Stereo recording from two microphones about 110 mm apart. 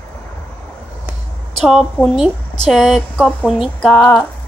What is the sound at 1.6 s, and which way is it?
Speech, 5° right (ahead or behind).